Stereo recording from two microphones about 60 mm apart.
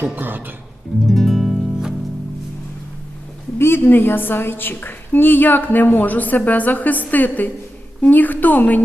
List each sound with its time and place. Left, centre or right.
0.0 s speech: right
1.0 s music: centre
3.6 s a woman's voice: left